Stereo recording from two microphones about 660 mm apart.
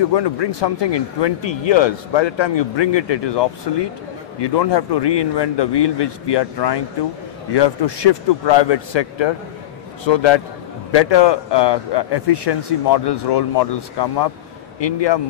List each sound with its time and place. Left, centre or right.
0.1 s speech: left